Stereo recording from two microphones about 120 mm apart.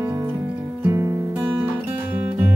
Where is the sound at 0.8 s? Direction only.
25° right (ahead or behind).